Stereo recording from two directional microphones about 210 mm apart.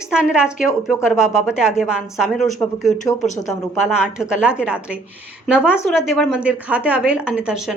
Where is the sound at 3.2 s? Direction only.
35° left (ahead or behind).